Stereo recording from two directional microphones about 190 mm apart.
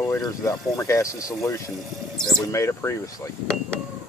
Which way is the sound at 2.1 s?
Centre (ahead or behind).